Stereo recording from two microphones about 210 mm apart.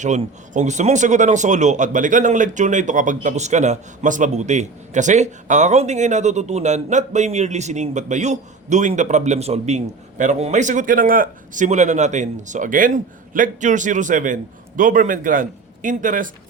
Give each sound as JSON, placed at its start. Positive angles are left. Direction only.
{"t": 0.0, "sound": "speech", "side_deg": -35}